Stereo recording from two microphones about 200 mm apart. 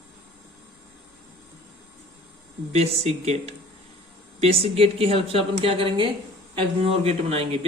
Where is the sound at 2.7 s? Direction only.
30° right (ahead or behind).